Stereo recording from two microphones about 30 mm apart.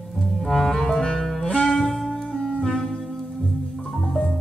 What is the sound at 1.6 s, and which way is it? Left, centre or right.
Music, centre.